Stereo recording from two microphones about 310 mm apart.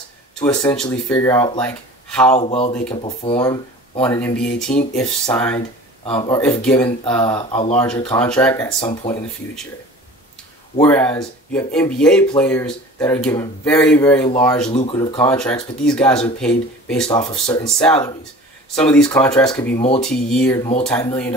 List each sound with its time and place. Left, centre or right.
0.4 s speech: centre
2.0 s a sound: centre
2.3 s speech: centre
6.0 s speech: centre
8.0 s speech: centre
10.8 s speech: centre
14.7 s speech: centre